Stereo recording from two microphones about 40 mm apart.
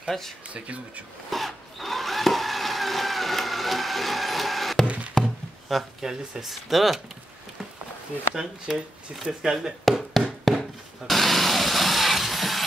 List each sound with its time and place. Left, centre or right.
0.0 s speech: centre
0.5 s speech: right
1.3 s a sound: centre
4.8 s music: right
5.2 s speech: centre
8.4 s speech: centre
10.5 s chopping: centre
11.1 s vehicle: centre